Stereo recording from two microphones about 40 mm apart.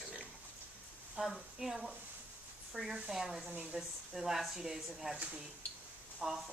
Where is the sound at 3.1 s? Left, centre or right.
Centre.